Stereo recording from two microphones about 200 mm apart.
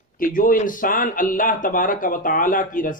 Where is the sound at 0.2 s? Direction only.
45° left (ahead or behind).